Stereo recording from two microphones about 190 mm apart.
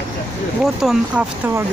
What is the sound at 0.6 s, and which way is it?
Speech, centre (ahead or behind).